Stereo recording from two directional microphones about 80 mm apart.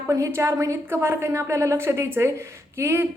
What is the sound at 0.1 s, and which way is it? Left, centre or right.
Speech, right.